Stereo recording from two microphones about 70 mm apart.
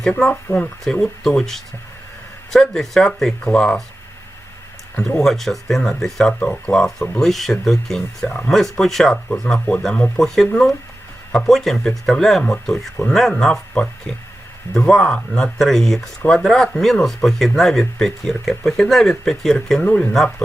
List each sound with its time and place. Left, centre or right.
0.2 s speech: centre
5.0 s speech: centre